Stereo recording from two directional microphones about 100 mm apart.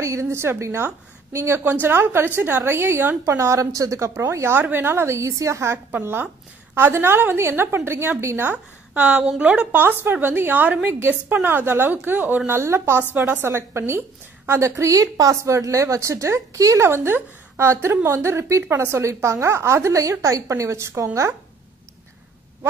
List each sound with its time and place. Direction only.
0.0 s a woman's voice: 30° right (ahead or behind)